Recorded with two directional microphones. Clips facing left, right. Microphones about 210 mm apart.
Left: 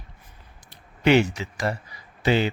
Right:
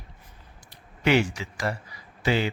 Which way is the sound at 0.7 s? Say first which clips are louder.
Left 4 dB; 25° left (ahead or behind).